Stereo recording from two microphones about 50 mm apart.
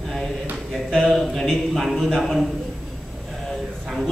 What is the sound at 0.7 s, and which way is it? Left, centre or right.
A man's voice, centre.